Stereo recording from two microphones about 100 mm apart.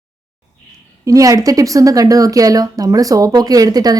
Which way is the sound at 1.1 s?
35° right (ahead or behind).